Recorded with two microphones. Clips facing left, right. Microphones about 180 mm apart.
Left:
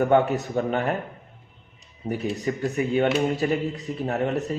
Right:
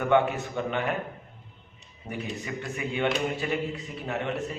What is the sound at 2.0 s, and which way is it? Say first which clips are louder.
A man's voice: left 8 dB; 40° left (ahead or behind).